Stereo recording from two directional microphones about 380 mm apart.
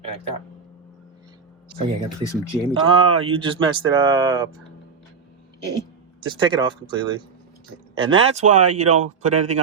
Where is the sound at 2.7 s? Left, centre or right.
Centre.